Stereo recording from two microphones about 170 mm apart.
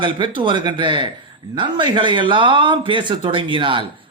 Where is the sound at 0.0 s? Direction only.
30° right (ahead or behind).